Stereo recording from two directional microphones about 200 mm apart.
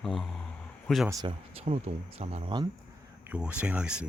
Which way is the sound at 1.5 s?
30° right (ahead or behind).